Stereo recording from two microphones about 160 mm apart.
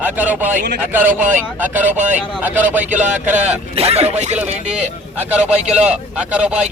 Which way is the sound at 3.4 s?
40° right (ahead or behind).